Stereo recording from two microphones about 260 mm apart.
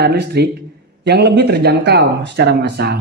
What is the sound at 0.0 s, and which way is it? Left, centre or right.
Speech, right.